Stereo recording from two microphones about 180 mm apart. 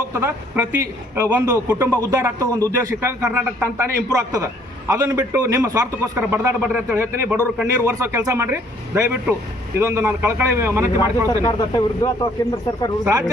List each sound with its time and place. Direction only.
0.1 s a man's voice: 15° right (ahead or behind)
11.3 s speech: 20° left (ahead or behind)
13.1 s speech: 20° right (ahead or behind)